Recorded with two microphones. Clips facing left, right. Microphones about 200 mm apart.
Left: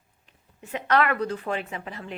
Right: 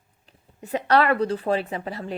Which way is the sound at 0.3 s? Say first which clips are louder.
Right 7 dB; 35° right (ahead or behind).